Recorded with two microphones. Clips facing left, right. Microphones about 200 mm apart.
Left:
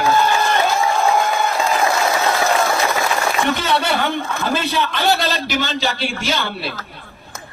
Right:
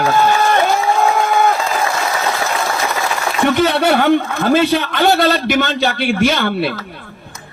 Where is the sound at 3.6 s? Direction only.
55° right (ahead or behind).